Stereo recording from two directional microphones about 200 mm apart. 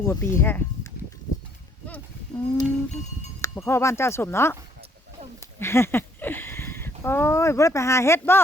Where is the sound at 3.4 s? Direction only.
15° left (ahead or behind).